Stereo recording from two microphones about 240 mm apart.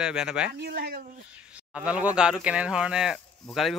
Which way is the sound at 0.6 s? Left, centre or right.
Right.